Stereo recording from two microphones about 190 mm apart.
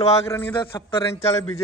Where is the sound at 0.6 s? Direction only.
25° left (ahead or behind).